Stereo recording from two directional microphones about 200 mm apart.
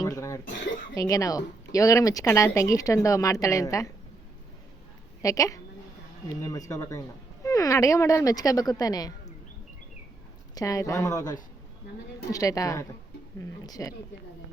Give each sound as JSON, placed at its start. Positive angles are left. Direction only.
{"t": 0.0, "sound": "cough", "side_deg": 15}
{"t": 0.9, "sound": "speech", "side_deg": 15}
{"t": 5.2, "sound": "speech", "side_deg": 15}
{"t": 10.5, "sound": "speech", "side_deg": 15}